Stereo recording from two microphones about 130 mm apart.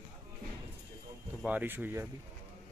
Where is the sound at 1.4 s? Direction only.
15° right (ahead or behind).